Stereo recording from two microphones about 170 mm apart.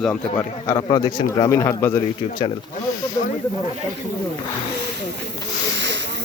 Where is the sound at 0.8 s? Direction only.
25° left (ahead or behind).